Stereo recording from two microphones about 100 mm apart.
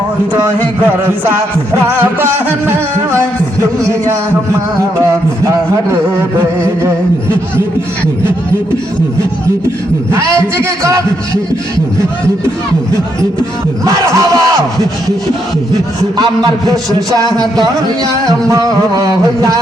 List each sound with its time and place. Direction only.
0.3 s music: 15° right (ahead or behind)
3.8 s music: 30° right (ahead or behind)
5.5 s music: 25° right (ahead or behind)
10.1 s music: 25° right (ahead or behind)
13.8 s music: 35° right (ahead or behind)
16.6 s music: 35° right (ahead or behind)